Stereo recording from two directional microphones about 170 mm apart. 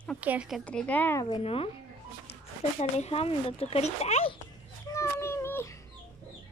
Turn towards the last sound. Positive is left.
turn(degrees=15)  # may be behind; listen again after turning